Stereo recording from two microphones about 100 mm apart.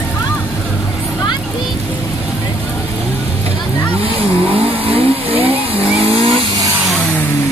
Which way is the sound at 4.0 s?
70° right (ahead or behind).